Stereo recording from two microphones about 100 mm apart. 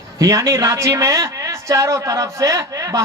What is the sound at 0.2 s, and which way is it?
A man's voice, 35° right (ahead or behind).